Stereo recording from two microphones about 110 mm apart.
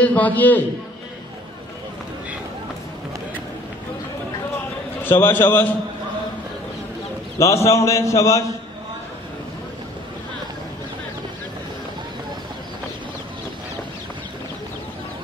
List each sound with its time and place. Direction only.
0.0 s a man's voice: 15° left (ahead or behind)
5.0 s a man's voice: 20° left (ahead or behind)
7.3 s a man's voice: 25° left (ahead or behind)